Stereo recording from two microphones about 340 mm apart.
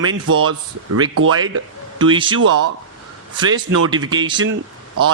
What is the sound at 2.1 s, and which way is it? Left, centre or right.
Speech, centre.